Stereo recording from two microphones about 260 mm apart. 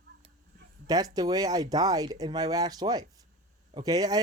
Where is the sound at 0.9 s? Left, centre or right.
Centre.